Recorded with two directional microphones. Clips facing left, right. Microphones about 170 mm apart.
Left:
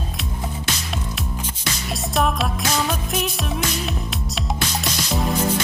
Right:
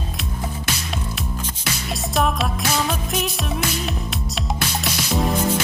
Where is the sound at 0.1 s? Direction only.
Centre (ahead or behind).